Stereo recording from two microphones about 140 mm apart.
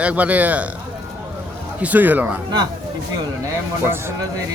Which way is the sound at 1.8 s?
10° right (ahead or behind).